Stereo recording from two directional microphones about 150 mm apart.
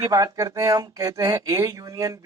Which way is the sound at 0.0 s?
25° right (ahead or behind).